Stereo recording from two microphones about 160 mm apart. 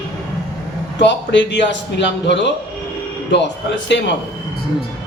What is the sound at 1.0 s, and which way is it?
A man's voice, 90° left.